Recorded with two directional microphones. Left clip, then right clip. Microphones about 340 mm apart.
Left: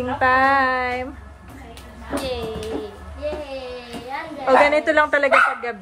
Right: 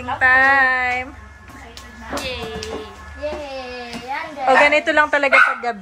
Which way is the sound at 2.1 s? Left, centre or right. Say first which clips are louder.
Even; centre.